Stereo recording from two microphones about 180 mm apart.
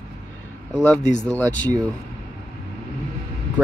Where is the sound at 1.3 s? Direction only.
10° left (ahead or behind).